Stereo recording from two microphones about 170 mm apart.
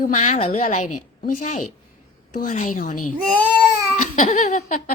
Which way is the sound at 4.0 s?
50° left (ahead or behind).